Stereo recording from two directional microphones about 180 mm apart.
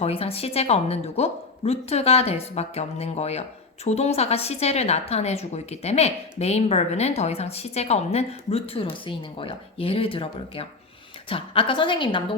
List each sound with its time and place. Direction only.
0.0 s a woman's voice: 35° left (ahead or behind)